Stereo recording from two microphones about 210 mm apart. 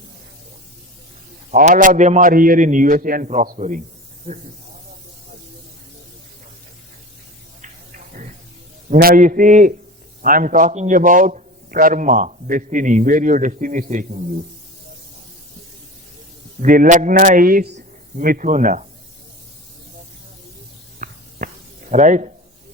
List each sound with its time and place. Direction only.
1.5 s a man's voice: 35° right (ahead or behind)
4.3 s speech: 25° right (ahead or behind)
7.6 s a sound: 40° right (ahead or behind)
8.9 s a man's voice: 40° right (ahead or behind)
16.6 s a man's voice: 40° right (ahead or behind)
21.0 s a sound: 40° right (ahead or behind)